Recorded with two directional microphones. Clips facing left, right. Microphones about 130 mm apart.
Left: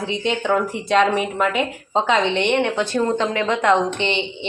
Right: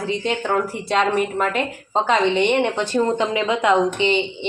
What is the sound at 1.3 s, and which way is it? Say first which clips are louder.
Speech: left 1 dB; 5° left (ahead or behind).